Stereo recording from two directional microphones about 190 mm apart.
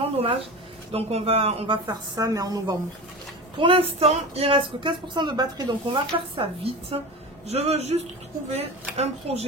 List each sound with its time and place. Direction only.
0.0 s a sound: 30° right (ahead or behind)
0.9 s speech: 30° right (ahead or behind)
2.1 s speech: 20° right (ahead or behind); by 9.4 s 35° right (ahead or behind)